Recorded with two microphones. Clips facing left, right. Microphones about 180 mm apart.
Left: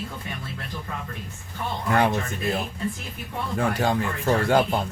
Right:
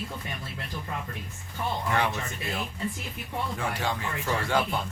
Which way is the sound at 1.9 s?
40° left (ahead or behind).